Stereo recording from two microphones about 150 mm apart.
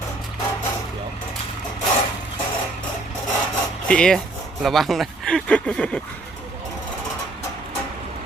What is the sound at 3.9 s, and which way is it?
Speech, 5° left (ahead or behind).